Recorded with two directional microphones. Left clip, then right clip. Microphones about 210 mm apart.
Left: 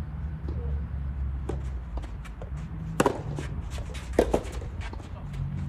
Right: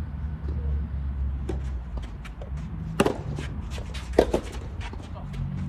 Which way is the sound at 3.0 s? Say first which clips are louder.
Right 1 dB; 5° left (ahead or behind).